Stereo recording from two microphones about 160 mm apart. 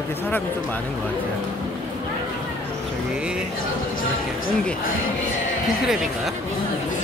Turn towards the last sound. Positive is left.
turn(degrees=0)  # may be behind; listen again after turning